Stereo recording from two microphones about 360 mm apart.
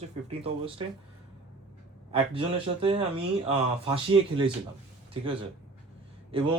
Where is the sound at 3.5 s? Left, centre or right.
Centre.